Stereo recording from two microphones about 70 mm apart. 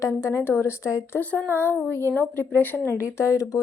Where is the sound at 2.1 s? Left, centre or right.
Left.